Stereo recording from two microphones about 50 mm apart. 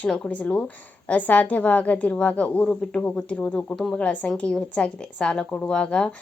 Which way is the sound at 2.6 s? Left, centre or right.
Centre.